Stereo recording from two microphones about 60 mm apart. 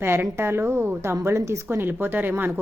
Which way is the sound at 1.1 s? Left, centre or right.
Right.